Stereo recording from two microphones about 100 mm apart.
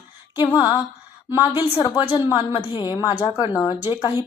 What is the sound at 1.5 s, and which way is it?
A woman's voice, 35° left (ahead or behind).